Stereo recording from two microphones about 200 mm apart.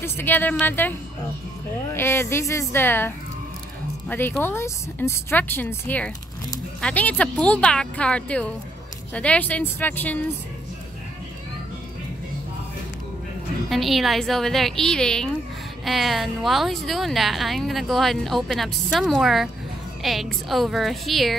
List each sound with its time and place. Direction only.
0.0 s speech: 10° left (ahead or behind)
2.0 s speech: 10° left (ahead or behind)
4.1 s a woman's voice: 10° left (ahead or behind)
13.7 s a woman's voice: centre (ahead or behind)